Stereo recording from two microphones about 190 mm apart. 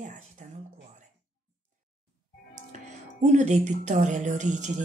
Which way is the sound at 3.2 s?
40° right (ahead or behind).